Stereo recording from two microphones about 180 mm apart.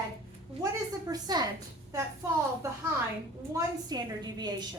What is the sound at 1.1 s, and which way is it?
A woman's voice, 20° right (ahead or behind).